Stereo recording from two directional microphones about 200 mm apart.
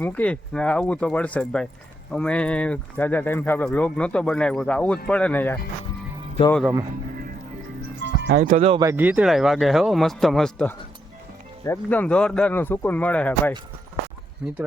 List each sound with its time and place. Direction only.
0.0 s speech: 5° left (ahead or behind)
8.0 s speech: 55° right (ahead or behind); by 8.8 s 35° right (ahead or behind)
8.8 s speech: 10° right (ahead or behind); by 13.5 s 5° left (ahead or behind)
14.4 s speech: 5° right (ahead or behind)